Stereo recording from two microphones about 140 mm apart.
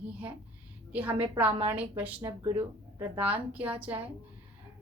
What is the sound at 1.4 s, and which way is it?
Speech, 45° right (ahead or behind).